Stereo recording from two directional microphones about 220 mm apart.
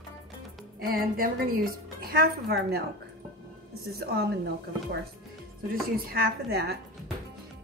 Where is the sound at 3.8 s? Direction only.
45° right (ahead or behind).